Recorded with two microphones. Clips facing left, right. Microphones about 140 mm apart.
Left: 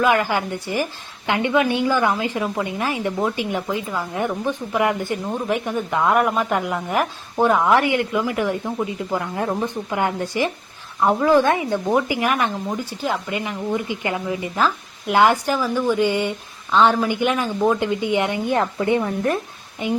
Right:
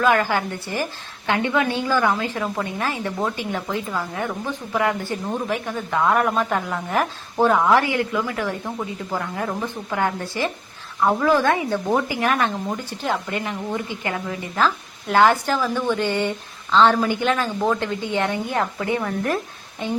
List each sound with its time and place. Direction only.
0.0 s a woman's voice: 15° left (ahead or behind)